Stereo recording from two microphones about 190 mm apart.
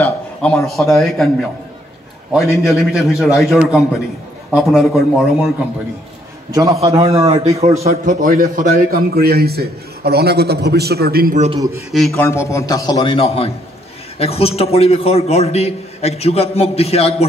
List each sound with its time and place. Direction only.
0.0 s a sound: 5° left (ahead or behind)
0.7 s a man's voice: centre (ahead or behind)
2.5 s a man's voice: centre (ahead or behind)
6.5 s a man's voice: 15° right (ahead or behind)
6.9 s a man's voice: 30° right (ahead or behind)
7.9 s a man's voice: 45° right (ahead or behind)
11.3 s a man's voice: 35° right (ahead or behind)
12.2 s a man's voice: 15° left (ahead or behind); by 17.3 s 30° left (ahead or behind)